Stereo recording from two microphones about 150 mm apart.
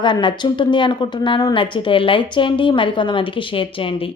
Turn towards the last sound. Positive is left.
turn(degrees=35)  # may be behind; listen again after turning